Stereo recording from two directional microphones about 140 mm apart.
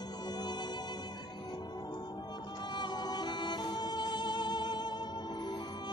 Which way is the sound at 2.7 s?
30° left (ahead or behind).